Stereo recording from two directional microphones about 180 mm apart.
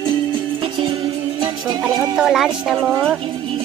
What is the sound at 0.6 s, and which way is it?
Music, 25° right (ahead or behind).